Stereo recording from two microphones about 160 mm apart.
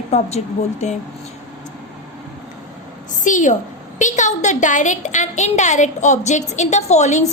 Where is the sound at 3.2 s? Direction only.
50° left (ahead or behind).